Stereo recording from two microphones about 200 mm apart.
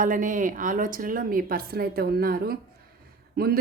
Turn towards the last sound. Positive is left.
turn(degrees=-50)  # may be behind; listen again after turning